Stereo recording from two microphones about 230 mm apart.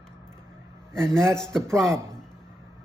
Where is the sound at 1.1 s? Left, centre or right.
Centre.